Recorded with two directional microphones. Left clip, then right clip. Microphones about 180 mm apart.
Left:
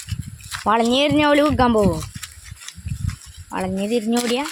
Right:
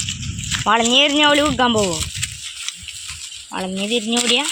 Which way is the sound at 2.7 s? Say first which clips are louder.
Right 7 dB; 15° left (ahead or behind).